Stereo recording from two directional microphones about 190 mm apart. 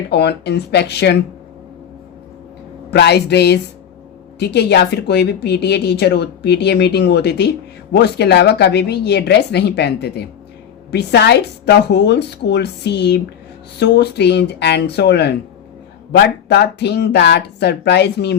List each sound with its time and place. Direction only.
0.1 s a woman's voice: 60° left (ahead or behind)
2.9 s a woman's voice: 60° left (ahead or behind)